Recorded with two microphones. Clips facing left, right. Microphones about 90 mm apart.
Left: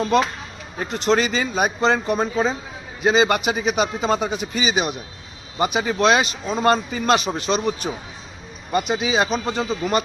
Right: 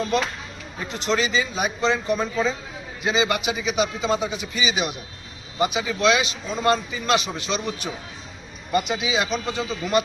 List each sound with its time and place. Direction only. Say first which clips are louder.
0.8 s a man's voice: left 4 dB; 45° left (ahead or behind)